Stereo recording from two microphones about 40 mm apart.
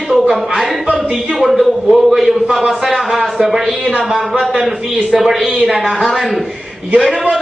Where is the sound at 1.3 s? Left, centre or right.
Centre.